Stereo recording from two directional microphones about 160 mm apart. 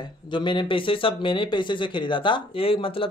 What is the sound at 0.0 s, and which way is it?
Speech, 30° left (ahead or behind).